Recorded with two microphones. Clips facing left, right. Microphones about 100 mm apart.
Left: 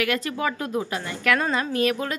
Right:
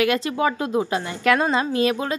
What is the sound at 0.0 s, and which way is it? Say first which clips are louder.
A woman's voice: right 5 dB; 25° right (ahead or behind).